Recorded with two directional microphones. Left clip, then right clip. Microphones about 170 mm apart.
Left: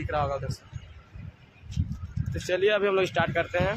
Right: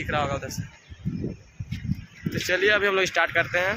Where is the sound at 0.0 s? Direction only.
5° right (ahead or behind).